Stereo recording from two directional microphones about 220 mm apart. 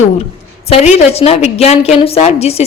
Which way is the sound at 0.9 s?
25° left (ahead or behind).